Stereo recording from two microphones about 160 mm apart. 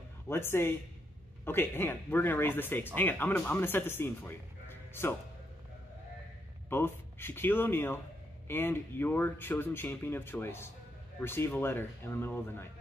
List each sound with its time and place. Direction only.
0.3 s speech: 15° left (ahead or behind)
6.7 s speech: 15° left (ahead or behind)